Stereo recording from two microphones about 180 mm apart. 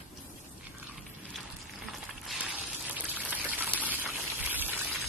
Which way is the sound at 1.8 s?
Centre (ahead or behind).